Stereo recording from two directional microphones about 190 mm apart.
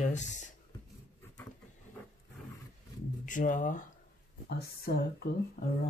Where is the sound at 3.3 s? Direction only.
45° left (ahead or behind).